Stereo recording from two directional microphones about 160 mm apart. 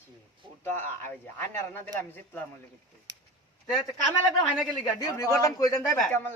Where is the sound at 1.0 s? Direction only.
15° left (ahead or behind).